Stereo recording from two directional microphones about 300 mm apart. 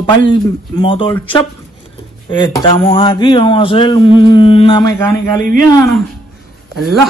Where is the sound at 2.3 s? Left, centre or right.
Centre.